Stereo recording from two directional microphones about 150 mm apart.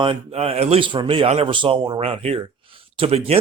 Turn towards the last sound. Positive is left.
turn(degrees=-45)  # may be behind; listen again after turning